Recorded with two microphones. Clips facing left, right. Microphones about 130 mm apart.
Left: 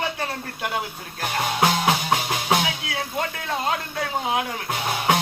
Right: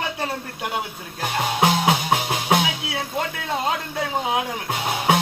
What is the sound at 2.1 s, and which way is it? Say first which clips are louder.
Music: right 2 dB; 20° right (ahead or behind).